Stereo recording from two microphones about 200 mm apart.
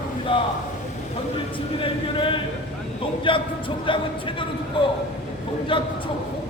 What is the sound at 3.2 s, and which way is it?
A man's voice, 25° left (ahead or behind).